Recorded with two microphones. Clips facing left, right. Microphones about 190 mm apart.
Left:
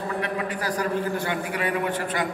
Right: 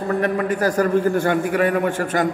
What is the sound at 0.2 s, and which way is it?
A man's voice, 45° right (ahead or behind).